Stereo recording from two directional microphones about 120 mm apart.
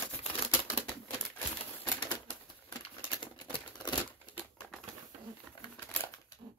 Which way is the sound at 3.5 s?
35° left (ahead or behind).